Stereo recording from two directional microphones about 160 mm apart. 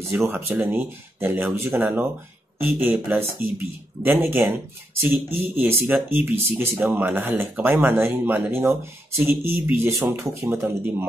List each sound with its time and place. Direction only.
0.3 s speech: 10° right (ahead or behind)